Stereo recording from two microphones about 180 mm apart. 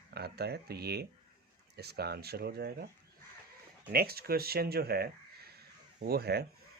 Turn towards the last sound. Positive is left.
turn(degrees=-60)  # may be behind; listen again after turning